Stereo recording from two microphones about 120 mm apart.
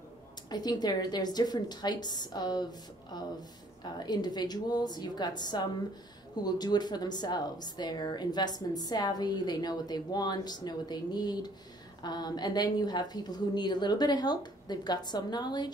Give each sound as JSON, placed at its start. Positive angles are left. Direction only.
{"t": 0.5, "sound": "speech", "side_deg": 35}